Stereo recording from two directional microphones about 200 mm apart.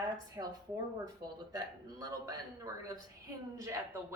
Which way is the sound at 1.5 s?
20° right (ahead or behind).